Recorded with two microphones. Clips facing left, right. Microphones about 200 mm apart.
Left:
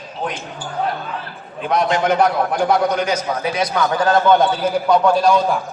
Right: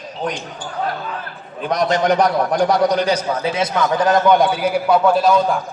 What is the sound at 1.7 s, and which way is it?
A man's voice, 40° right (ahead or behind).